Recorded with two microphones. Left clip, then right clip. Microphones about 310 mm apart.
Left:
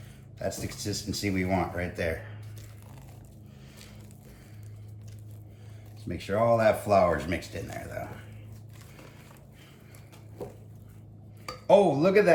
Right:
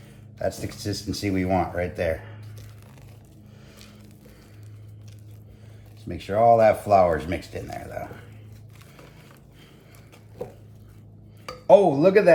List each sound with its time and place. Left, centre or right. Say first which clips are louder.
0.3 s speech: right 5 dB; centre
6.1 s speech: right 7 dB; centre
11.6 s speech: right 5 dB; centre